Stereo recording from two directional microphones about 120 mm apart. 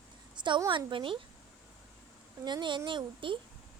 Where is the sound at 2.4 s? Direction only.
40° right (ahead or behind).